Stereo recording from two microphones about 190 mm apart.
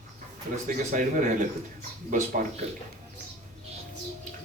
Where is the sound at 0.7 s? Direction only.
45° right (ahead or behind).